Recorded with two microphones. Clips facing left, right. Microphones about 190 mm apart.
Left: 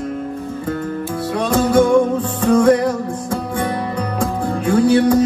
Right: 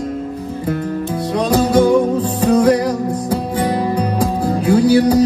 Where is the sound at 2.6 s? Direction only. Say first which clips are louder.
Left 2 dB; 25° left (ahead or behind).